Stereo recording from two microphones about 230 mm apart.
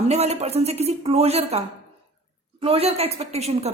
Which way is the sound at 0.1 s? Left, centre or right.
Right.